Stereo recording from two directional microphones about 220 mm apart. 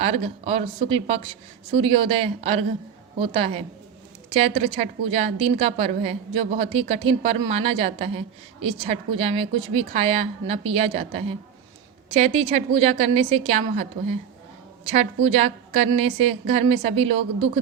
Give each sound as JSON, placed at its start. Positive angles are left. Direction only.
{"t": 0.0, "sound": "a woman's voice", "side_deg": -25}